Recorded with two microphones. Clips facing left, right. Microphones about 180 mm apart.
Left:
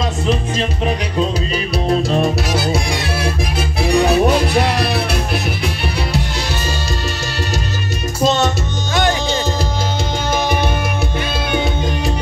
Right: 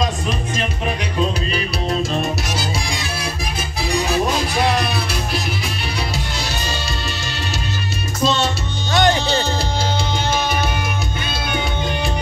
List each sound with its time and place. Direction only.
2.5 s music: 60° left (ahead or behind)